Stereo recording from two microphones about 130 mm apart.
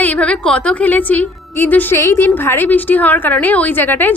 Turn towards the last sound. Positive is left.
turn(degrees=15)  # may be behind; listen again after turning